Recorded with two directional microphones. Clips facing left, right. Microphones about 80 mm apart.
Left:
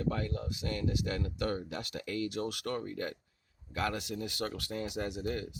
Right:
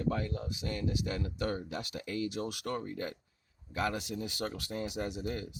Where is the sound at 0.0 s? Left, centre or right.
Centre.